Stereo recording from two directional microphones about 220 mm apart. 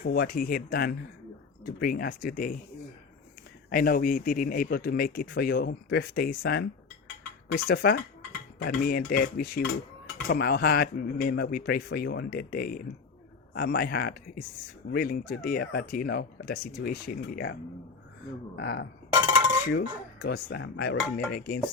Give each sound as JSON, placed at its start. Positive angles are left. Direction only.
{"t": 0.0, "sound": "speech", "side_deg": 45}
{"t": 3.7, "sound": "speech", "side_deg": 40}
{"t": 21.0, "sound": "dishes", "side_deg": 5}
{"t": 21.3, "sound": "speech", "side_deg": 45}